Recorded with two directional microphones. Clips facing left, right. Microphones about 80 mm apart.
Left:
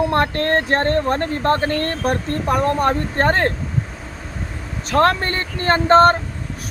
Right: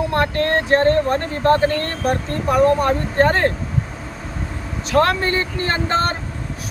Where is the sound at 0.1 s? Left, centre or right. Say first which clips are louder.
Left 1 dB; left.